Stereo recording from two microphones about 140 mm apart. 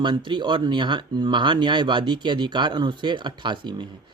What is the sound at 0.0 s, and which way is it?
Speech, 35° right (ahead or behind).